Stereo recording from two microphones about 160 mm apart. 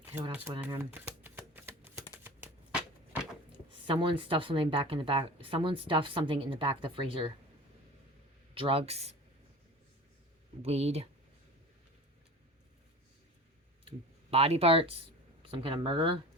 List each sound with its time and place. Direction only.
0.0 s speech: 15° right (ahead or behind)
0.7 s typewriter: 15° right (ahead or behind)
2.1 s a sound: 15° right (ahead or behind)
3.7 s speech: 30° right (ahead or behind)
8.5 s speech: 35° right (ahead or behind)
10.6 s speech: 40° right (ahead or behind)
14.3 s speech: 40° right (ahead or behind)